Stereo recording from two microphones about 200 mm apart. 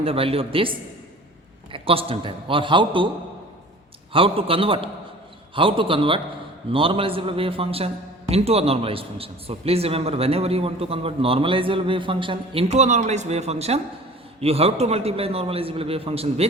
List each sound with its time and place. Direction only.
0.0 s a man's voice: 30° right (ahead or behind)
1.7 s a man's voice: 30° right (ahead or behind)
4.1 s a man's voice: 25° right (ahead or behind)